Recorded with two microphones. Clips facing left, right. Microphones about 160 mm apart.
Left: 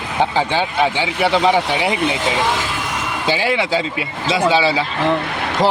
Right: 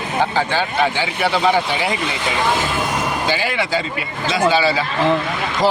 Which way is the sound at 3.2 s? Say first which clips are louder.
Left 2 dB; 30° left (ahead or behind).